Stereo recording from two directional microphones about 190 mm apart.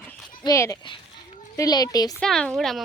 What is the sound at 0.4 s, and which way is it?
A child's voice, 15° left (ahead or behind).